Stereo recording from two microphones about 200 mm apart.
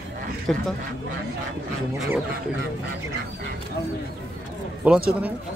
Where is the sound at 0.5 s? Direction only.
5° left (ahead or behind).